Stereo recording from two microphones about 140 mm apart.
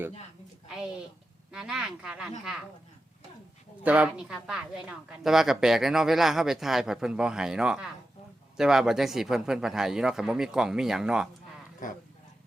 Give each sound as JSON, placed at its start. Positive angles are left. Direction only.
{"t": 1.5, "sound": "a woman's voice", "side_deg": -5}
{"t": 3.8, "sound": "a woman's voice", "side_deg": -10}
{"t": 11.8, "sound": "speech", "side_deg": 75}